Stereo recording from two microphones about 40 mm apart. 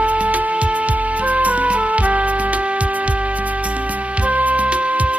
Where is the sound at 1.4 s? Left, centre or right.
Right.